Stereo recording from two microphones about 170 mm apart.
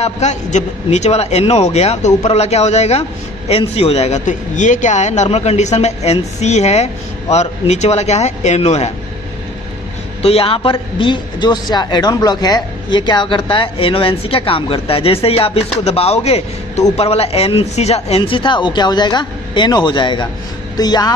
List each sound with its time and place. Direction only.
0.0 s a man's voice: 40° left (ahead or behind)
10.2 s a man's voice: 35° left (ahead or behind)